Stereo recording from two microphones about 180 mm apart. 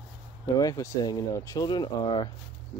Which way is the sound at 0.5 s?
20° left (ahead or behind).